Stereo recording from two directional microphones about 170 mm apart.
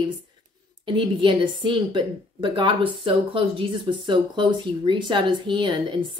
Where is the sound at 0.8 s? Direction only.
30° right (ahead or behind).